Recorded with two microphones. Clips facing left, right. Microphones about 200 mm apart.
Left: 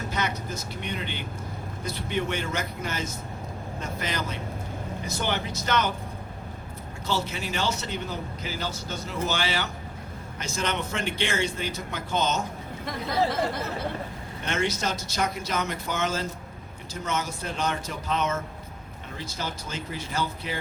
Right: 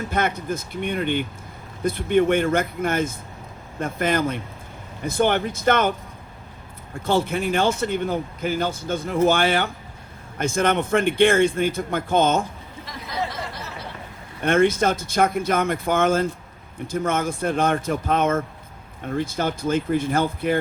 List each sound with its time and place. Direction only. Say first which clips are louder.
0.1 s a man's voice: right 8 dB; 55° right (ahead or behind)
7.0 s a man's voice: right 8 dB; 55° right (ahead or behind)
12.8 s chatter: left 3 dB; 55° left (ahead or behind)
14.4 s a man's voice: right 10 dB; 55° right (ahead or behind)